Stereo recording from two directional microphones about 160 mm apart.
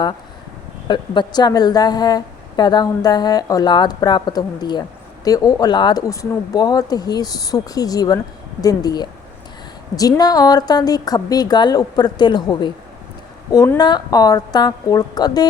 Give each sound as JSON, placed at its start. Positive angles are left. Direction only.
{"t": 0.9, "sound": "a woman's voice", "side_deg": 30}